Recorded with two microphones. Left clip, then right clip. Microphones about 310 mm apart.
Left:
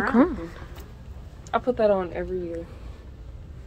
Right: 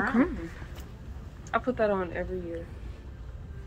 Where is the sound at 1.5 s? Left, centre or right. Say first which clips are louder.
Left 5 dB; left.